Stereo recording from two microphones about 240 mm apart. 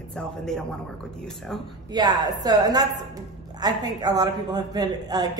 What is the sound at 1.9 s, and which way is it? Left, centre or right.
A man's voice, centre.